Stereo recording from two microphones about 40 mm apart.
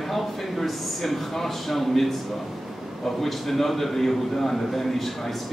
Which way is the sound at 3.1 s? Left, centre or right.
Centre.